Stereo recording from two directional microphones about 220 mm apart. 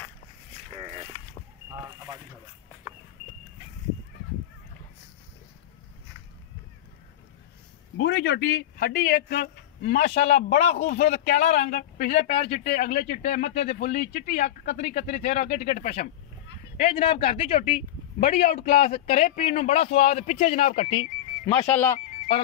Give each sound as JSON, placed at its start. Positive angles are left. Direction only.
{"t": 8.0, "sound": "a man's voice", "side_deg": 50}
{"t": 12.1, "sound": "a man's voice", "side_deg": 30}
{"t": 21.5, "sound": "speech", "side_deg": 10}